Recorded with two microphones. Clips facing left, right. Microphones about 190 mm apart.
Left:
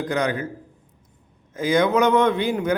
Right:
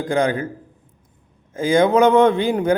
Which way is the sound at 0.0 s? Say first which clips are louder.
Right 4 dB; 30° right (ahead or behind).